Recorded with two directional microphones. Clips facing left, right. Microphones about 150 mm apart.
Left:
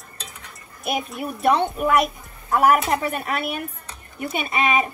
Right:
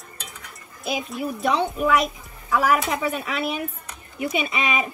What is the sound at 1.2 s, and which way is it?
A woman's voice, 60° left (ahead or behind).